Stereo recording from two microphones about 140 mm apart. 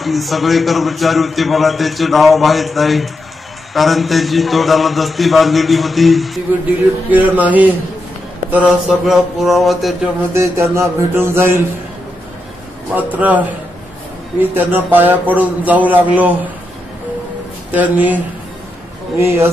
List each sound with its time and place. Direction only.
0.0 s a man's voice: centre (ahead or behind)
7.1 s a man's voice: 10° right (ahead or behind)
10.3 s mantra: 20° right (ahead or behind)
12.9 s a man's voice: 10° right (ahead or behind)
14.5 s a man's voice: 15° right (ahead or behind)
17.6 s a man's voice: 10° right (ahead or behind)